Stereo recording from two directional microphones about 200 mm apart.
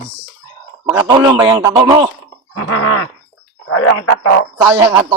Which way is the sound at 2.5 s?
90° left.